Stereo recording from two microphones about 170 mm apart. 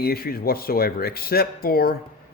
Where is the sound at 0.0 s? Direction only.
60° left (ahead or behind).